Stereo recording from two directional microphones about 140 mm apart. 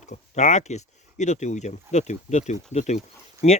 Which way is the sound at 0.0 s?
55° left (ahead or behind).